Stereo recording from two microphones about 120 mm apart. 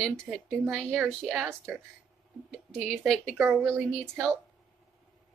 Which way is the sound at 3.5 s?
20° right (ahead or behind).